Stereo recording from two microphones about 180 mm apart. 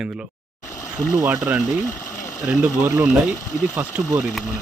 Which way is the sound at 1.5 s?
10° right (ahead or behind).